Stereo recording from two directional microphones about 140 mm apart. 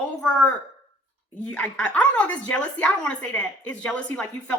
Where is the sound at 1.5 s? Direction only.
10° left (ahead or behind).